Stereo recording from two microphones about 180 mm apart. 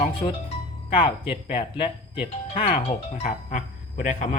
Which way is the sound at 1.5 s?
30° left (ahead or behind).